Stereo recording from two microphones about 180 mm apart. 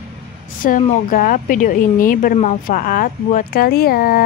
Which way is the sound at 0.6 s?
50° left (ahead or behind).